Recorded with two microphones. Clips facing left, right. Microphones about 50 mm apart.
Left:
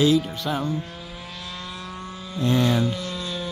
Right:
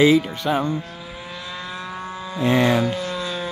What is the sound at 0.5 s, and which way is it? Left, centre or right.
Speech, right.